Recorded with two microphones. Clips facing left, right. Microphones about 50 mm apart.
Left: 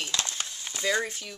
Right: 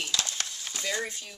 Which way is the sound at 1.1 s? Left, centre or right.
Left.